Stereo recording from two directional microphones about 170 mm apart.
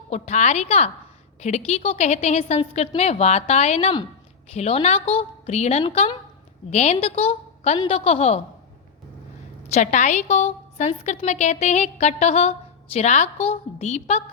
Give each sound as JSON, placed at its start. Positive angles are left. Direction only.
{"t": 0.1, "sound": "a woman's voice", "side_deg": 40}
{"t": 9.6, "sound": "a woman's voice", "side_deg": 40}